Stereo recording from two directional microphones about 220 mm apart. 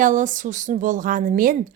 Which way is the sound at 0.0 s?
35° right (ahead or behind).